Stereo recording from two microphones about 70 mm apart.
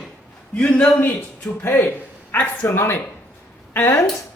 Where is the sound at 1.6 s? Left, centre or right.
Left.